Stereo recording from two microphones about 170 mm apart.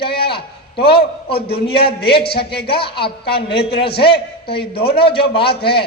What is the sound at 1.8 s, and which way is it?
Speech, 70° left (ahead or behind).